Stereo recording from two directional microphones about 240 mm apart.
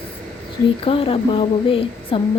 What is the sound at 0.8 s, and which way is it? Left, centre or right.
A woman's voice, left.